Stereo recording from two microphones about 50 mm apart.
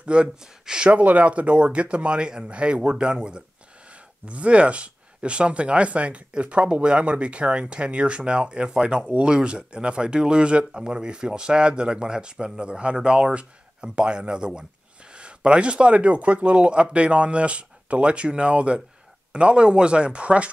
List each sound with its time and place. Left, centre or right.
0.0 s speech: centre